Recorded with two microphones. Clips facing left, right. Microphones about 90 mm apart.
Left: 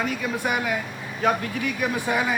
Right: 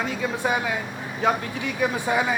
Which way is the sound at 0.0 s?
25° right (ahead or behind).